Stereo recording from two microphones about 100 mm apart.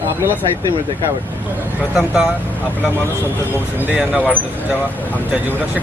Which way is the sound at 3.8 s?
10° right (ahead or behind).